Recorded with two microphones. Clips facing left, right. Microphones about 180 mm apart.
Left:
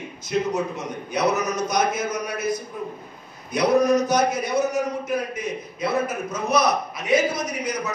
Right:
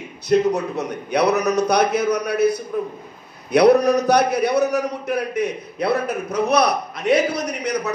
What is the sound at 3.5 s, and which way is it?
A man's voice, 65° right (ahead or behind).